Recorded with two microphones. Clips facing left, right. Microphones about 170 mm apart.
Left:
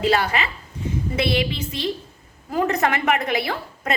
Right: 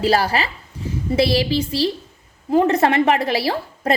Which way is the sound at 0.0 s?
35° right (ahead or behind).